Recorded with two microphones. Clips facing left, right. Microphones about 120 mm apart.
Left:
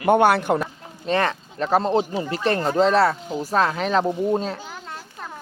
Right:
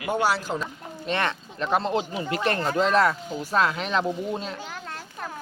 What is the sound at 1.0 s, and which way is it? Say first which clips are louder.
Speech: left 5 dB; 35° left (ahead or behind).